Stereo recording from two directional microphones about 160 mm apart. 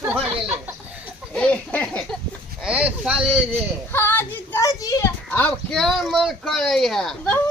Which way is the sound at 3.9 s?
15° left (ahead or behind).